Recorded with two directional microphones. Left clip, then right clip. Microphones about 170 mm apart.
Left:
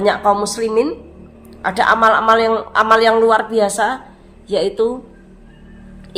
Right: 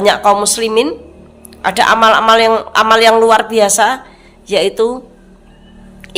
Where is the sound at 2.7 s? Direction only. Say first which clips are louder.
Right 2 dB; 10° right (ahead or behind).